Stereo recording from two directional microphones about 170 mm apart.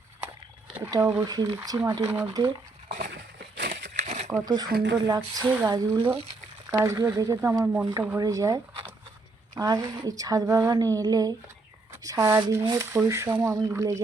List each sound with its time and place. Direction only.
0.9 s speech: 20° right (ahead or behind)
3.6 s a sound: 60° right (ahead or behind)
4.4 s speech: 25° right (ahead or behind)
4.7 s speech: 90° right
5.0 s speech: 25° right (ahead or behind)